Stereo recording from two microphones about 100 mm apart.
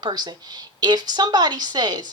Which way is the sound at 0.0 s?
45° right (ahead or behind).